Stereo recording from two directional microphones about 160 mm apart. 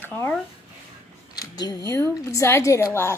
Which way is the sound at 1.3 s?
25° left (ahead or behind).